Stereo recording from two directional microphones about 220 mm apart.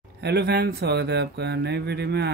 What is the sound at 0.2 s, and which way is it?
Speech, 50° right (ahead or behind).